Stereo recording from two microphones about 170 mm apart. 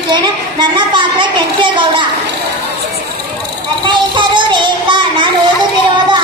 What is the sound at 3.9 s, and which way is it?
Music, 25° right (ahead or behind).